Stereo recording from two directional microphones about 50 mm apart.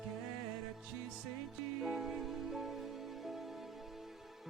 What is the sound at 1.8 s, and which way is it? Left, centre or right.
Music, centre.